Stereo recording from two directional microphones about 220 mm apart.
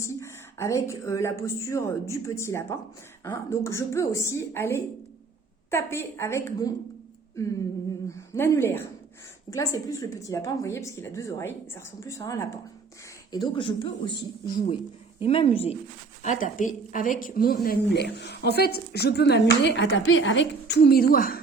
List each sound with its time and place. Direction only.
0.0 s speech: 10° left (ahead or behind)
8.0 s a sound: 15° left (ahead or behind)
9.5 s a woman's voice: 15° left (ahead or behind); by 21.4 s 40° left (ahead or behind)